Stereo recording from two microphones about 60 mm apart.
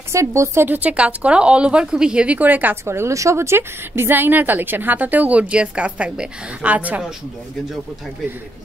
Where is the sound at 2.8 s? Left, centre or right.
Right.